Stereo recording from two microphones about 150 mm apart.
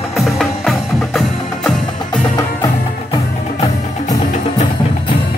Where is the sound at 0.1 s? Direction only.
Centre (ahead or behind).